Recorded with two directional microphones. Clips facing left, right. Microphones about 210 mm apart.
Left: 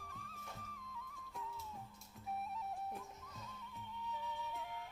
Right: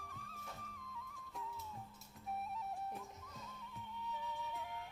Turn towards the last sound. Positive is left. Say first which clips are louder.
# even
turn(degrees=0)  # may be behind; listen again after turning